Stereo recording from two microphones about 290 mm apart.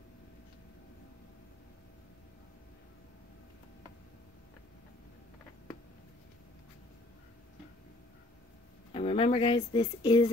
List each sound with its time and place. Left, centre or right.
8.9 s speech: centre